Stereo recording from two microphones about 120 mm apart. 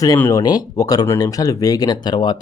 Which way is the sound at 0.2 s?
25° left (ahead or behind).